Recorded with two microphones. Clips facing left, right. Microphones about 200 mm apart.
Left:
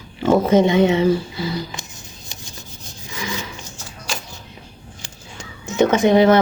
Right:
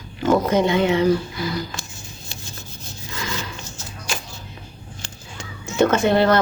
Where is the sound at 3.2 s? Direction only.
15° left (ahead or behind).